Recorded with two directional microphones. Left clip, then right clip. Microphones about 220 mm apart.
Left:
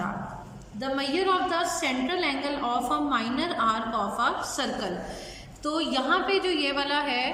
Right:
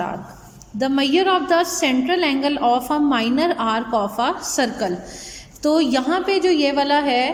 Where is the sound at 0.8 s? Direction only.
35° right (ahead or behind).